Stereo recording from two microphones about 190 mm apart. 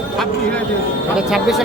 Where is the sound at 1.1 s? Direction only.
Centre (ahead or behind).